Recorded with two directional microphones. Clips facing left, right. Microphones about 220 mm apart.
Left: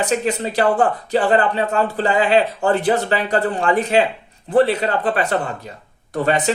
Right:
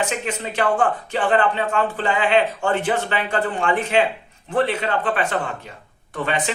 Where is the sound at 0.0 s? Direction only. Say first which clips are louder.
Left 5 dB; 35° left (ahead or behind).